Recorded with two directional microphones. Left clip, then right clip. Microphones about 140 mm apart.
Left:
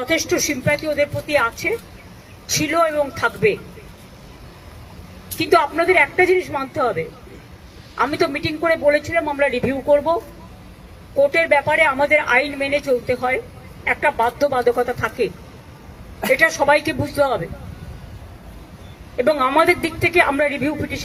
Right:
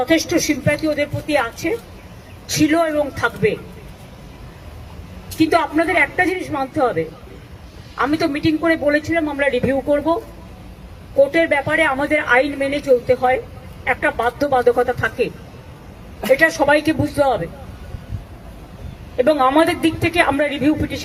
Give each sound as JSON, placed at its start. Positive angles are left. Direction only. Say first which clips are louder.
{"t": 0.0, "sound": "a woman's voice", "louder": "right 2 dB", "side_deg": 30}
{"t": 5.4, "sound": "a woman's voice", "louder": "even", "side_deg": 35}
{"t": 11.2, "sound": "a woman's voice", "louder": "right 1 dB", "side_deg": 35}
{"t": 19.1, "sound": "a woman's voice", "louder": "right 2 dB", "side_deg": 35}